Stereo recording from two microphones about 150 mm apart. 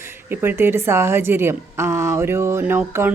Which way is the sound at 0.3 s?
15° right (ahead or behind).